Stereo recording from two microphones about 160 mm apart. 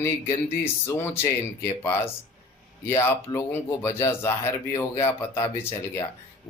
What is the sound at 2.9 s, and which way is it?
Speech, 15° left (ahead or behind).